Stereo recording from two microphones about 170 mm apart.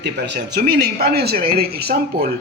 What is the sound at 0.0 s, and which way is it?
Speech, 90° right.